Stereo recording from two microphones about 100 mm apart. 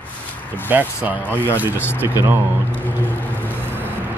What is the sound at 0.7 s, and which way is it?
Speech, 20° right (ahead or behind).